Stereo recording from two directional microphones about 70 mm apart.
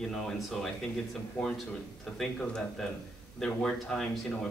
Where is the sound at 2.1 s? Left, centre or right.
Centre.